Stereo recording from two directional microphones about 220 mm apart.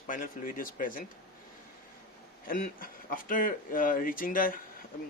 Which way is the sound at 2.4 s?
40° left (ahead or behind).